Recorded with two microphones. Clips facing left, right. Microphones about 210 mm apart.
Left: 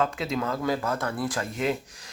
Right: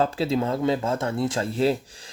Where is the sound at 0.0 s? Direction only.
30° right (ahead or behind).